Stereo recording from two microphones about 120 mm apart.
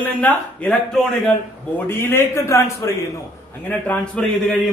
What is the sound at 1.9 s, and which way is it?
A man's voice, 20° left (ahead or behind).